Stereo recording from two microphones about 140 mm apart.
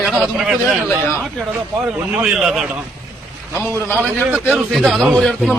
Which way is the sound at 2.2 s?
5° right (ahead or behind).